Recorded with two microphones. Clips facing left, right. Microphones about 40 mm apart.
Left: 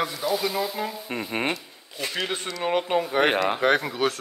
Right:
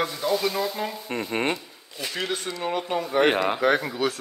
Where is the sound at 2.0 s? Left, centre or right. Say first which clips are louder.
Even; left.